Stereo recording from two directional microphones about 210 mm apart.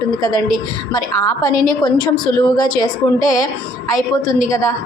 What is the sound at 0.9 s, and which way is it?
A woman's voice, 15° left (ahead or behind).